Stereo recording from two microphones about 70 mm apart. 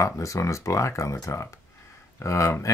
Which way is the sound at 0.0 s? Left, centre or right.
Left.